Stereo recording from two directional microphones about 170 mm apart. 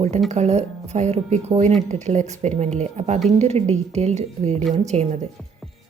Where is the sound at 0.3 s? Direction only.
40° right (ahead or behind).